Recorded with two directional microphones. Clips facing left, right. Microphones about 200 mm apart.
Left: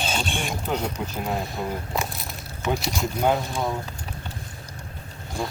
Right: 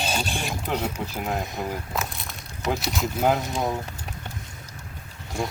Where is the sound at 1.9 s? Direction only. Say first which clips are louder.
Left 2 dB; centre (ahead or behind).